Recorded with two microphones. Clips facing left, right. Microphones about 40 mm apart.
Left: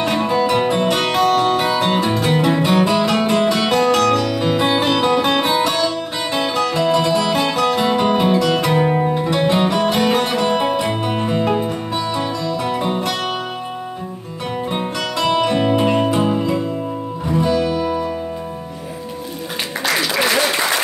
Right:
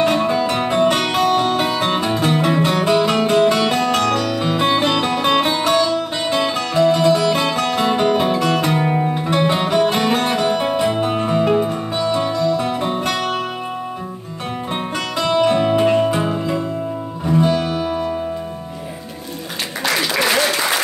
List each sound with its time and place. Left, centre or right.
0.1 s music: centre
14.7 s music: centre
17.4 s music: centre
19.8 s music: centre
20.3 s applause: centre